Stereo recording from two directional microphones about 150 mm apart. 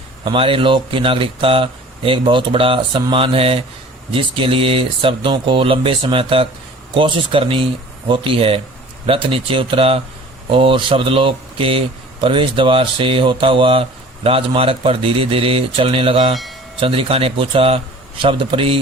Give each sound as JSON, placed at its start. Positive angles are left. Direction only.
{"t": 0.3, "sound": "speech", "side_deg": -35}
{"t": 16.3, "sound": "speech", "side_deg": 0}
{"t": 16.8, "sound": "speech", "side_deg": -35}